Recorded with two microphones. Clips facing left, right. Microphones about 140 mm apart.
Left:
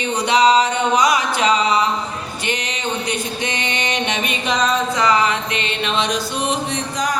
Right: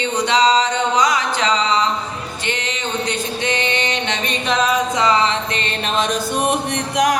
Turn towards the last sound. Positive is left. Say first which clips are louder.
# right 4 dB
turn(degrees=-70)  # may be behind; listen again after turning